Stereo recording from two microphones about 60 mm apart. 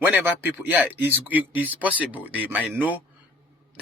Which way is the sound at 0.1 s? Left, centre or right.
Right.